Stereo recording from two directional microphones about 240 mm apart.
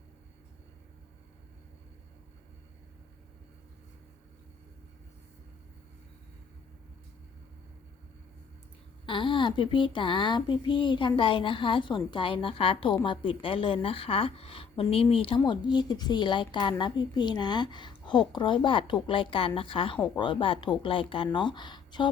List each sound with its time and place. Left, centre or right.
9.0 s speech: centre